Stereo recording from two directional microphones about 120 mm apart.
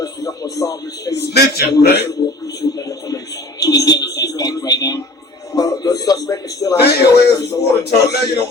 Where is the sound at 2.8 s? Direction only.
30° left (ahead or behind).